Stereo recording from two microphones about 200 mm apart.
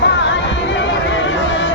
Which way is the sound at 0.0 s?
60° left (ahead or behind).